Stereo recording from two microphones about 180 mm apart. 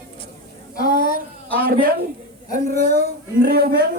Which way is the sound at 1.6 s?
55° right (ahead or behind).